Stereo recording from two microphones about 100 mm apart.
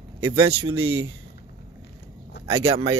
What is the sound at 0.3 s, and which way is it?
Speech, 65° right (ahead or behind).